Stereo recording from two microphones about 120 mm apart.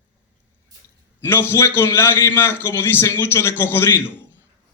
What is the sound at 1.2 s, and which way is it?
A man's voice, 20° left (ahead or behind).